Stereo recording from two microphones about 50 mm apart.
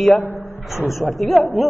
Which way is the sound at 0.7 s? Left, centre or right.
Left.